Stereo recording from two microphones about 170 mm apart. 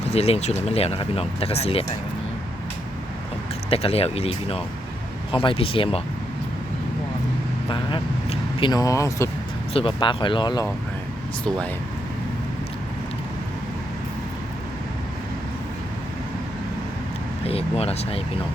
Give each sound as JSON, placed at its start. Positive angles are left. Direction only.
{"t": 0.1, "sound": "speech", "side_deg": 40}
{"t": 3.7, "sound": "speech", "side_deg": 35}
{"t": 7.7, "sound": "speech", "side_deg": 30}
{"t": 9.7, "sound": "speech", "side_deg": 30}
{"t": 17.4, "sound": "speech", "side_deg": 35}